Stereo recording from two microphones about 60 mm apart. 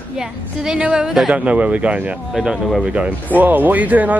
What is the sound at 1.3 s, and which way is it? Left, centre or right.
A woman's voice, right.